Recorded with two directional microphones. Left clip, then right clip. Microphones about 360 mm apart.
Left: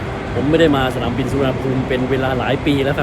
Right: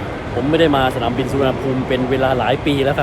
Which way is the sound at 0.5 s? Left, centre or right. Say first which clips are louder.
Even; centre.